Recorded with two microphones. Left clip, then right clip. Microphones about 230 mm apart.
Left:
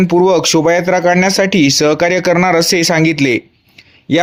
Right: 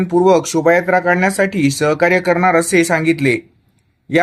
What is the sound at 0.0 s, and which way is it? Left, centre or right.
Speech, left.